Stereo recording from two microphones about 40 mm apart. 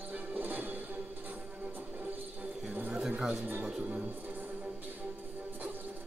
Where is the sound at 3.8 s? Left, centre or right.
Right.